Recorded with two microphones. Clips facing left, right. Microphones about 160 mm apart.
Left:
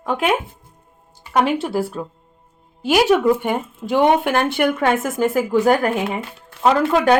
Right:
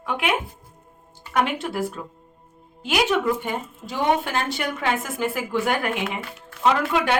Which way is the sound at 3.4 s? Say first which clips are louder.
Left 7 dB; 60° left (ahead or behind).